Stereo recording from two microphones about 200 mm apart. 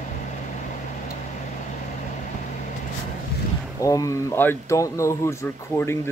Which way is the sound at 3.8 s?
15° left (ahead or behind).